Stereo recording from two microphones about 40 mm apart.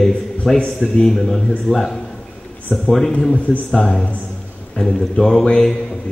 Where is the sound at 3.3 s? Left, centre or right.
Left.